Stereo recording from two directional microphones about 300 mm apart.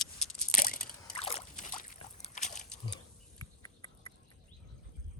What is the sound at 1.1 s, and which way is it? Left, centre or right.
Slosh, centre.